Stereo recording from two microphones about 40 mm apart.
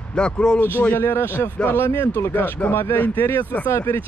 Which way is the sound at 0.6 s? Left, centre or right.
Left.